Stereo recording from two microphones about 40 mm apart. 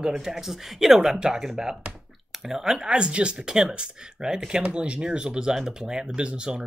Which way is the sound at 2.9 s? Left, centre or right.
Right.